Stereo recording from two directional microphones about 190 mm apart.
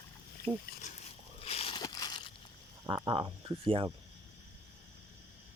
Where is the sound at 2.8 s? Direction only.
25° right (ahead or behind).